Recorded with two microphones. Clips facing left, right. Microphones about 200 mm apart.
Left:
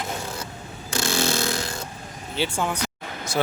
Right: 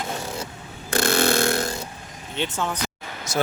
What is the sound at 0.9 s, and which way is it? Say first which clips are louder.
Burping: right 4 dB; 55° right (ahead or behind).